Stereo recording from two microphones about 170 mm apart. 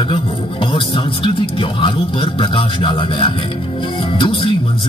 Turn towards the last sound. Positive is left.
turn(degrees=30)  # may be behind; listen again after turning